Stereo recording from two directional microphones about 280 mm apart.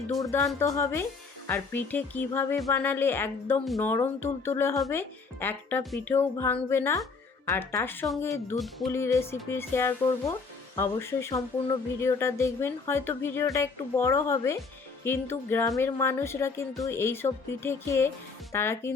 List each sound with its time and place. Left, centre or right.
0.1 s speech: centre